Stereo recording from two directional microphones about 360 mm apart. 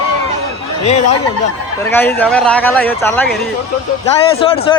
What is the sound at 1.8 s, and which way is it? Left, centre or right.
Speech, centre.